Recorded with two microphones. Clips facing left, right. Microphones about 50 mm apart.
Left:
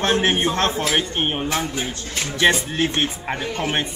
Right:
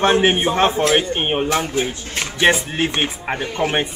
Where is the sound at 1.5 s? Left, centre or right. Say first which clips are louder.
Right 4 dB; centre.